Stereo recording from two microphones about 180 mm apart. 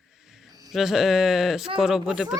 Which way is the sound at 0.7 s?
Centre (ahead or behind).